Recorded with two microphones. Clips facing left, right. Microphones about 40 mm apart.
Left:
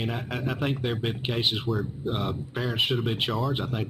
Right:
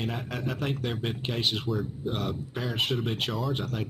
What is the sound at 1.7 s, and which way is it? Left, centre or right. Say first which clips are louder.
A man's voice: left 2 dB; centre.